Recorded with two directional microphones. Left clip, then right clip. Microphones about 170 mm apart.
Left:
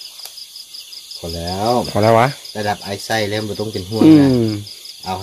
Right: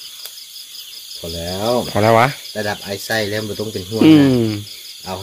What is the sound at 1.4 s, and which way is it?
Speech, 40° left (ahead or behind).